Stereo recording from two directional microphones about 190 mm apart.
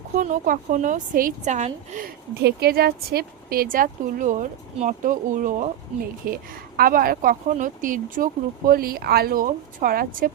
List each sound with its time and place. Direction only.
0.2 s a woman's voice: 40° right (ahead or behind)
2.4 s speech: 60° right (ahead or behind)